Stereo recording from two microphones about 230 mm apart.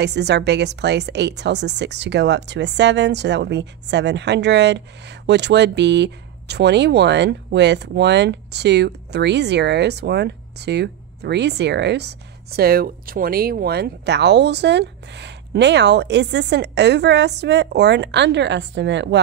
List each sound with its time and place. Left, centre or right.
0.0 s a woman's voice: right